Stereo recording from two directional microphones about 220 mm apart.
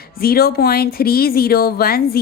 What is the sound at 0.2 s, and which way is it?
A woman's voice, 45° left (ahead or behind).